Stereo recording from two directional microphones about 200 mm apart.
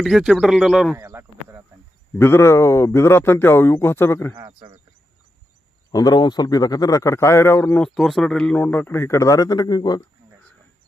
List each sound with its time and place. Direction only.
0.0 s speech: centre (ahead or behind)
0.9 s a sound: 15° right (ahead or behind)
2.1 s a man's voice: 10° left (ahead or behind)
4.4 s speech: 25° right (ahead or behind)
5.9 s a man's voice: 20° left (ahead or behind)
7.9 s a man's voice: centre (ahead or behind); by 10.0 s 20° left (ahead or behind)